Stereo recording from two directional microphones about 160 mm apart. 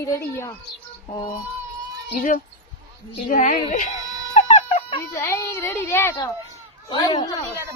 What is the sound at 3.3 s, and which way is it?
Speech, 55° left (ahead or behind).